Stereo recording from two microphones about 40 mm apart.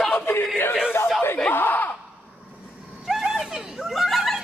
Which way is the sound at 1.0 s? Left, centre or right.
Left.